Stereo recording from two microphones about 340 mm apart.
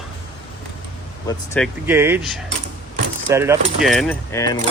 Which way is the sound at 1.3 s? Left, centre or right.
Centre.